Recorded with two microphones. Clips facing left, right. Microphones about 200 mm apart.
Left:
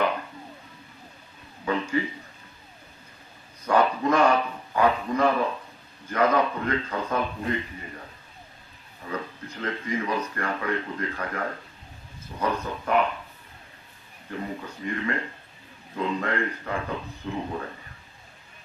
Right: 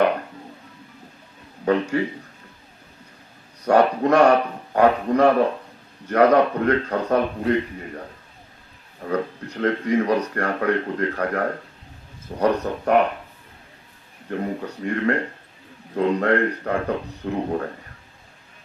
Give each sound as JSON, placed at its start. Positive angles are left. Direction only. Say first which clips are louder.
{"t": 1.6, "sound": "a man's voice", "louder": "right 6 dB", "side_deg": -60}
{"t": 3.6, "sound": "speech", "louder": "right 5 dB", "side_deg": -65}
{"t": 9.0, "sound": "speech", "louder": "right 9 dB", "side_deg": -65}
{"t": 14.3, "sound": "speech", "louder": "right 7 dB", "side_deg": -55}